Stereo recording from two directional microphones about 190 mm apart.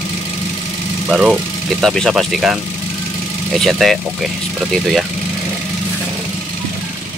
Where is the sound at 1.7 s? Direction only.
Centre (ahead or behind).